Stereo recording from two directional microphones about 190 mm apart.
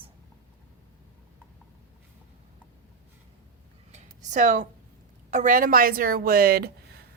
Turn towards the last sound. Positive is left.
turn(degrees=-55)  # may be behind; listen again after turning